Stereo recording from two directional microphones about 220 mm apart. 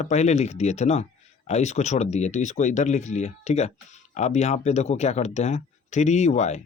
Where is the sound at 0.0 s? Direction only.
30° left (ahead or behind).